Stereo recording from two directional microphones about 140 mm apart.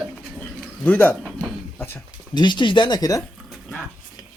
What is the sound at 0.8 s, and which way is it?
Speech, 10° left (ahead or behind).